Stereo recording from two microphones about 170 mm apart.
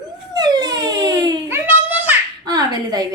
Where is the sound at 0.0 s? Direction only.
25° right (ahead or behind).